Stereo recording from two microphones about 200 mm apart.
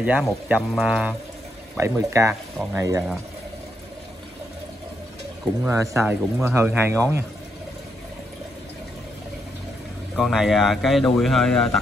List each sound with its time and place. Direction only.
0.0 s speech: 5° right (ahead or behind)
5.6 s speech: 15° right (ahead or behind)
10.1 s speech: centre (ahead or behind)